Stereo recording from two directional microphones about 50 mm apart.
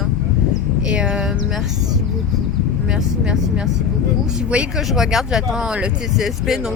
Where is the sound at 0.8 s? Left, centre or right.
Centre.